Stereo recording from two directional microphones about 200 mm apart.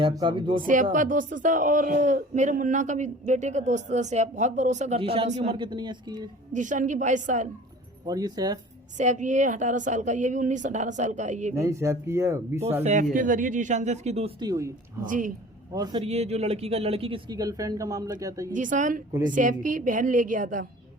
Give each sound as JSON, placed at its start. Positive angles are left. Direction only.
{"t": 0.0, "sound": "speech", "side_deg": -25}
{"t": 0.6, "sound": "speech", "side_deg": -40}
{"t": 6.5, "sound": "speech", "side_deg": -40}
{"t": 8.0, "sound": "speech", "side_deg": -20}
{"t": 9.0, "sound": "speech", "side_deg": -35}
{"t": 11.5, "sound": "speech", "side_deg": -15}
{"t": 12.8, "sound": "speech", "side_deg": -35}
{"t": 15.0, "sound": "speech", "side_deg": -40}
{"t": 15.7, "sound": "speech", "side_deg": -20}
{"t": 16.0, "sound": "speech", "side_deg": -30}
{"t": 18.5, "sound": "speech", "side_deg": -40}